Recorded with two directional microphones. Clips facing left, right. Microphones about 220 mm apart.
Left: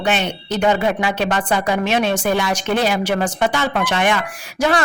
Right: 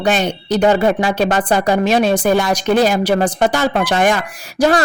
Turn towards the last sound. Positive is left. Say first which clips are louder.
# right 4 dB
turn(degrees=-40)  # may be behind; listen again after turning